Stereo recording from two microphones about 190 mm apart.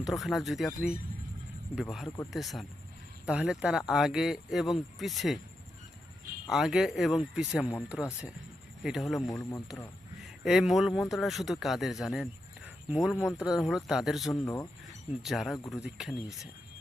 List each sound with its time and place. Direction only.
0.0 s speech: centre (ahead or behind)
6.5 s speech: centre (ahead or behind)
8.8 s speech: centre (ahead or behind)
9.3 s speech: 20° left (ahead or behind)
10.2 s speech: centre (ahead or behind)
14.4 s speech: 15° left (ahead or behind)
15.2 s speech: centre (ahead or behind)